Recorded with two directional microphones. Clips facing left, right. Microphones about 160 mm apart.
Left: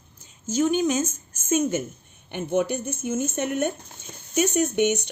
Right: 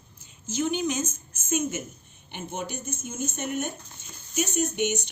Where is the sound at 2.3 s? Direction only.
60° left (ahead or behind).